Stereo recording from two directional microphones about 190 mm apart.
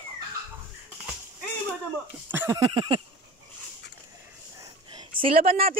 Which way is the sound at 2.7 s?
25° right (ahead or behind).